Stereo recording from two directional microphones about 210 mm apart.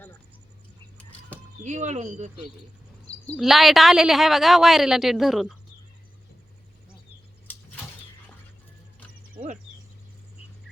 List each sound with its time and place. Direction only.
1.6 s speech: 35° right (ahead or behind)
3.3 s a woman's voice: centre (ahead or behind)